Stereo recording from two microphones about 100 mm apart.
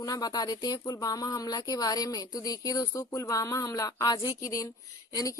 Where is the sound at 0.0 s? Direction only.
40° left (ahead or behind).